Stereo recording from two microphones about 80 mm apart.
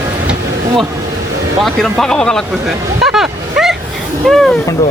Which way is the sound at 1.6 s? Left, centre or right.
Centre.